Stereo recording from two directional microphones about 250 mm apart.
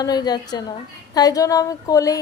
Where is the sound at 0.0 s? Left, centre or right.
Centre.